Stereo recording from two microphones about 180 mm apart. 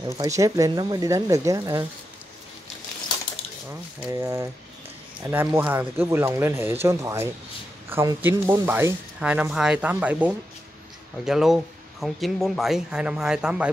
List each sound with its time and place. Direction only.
0.2 s speech: 15° right (ahead or behind)
4.1 s speech: 15° right (ahead or behind)